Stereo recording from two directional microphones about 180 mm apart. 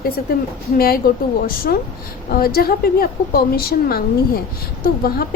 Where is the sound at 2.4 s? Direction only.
55° left (ahead or behind).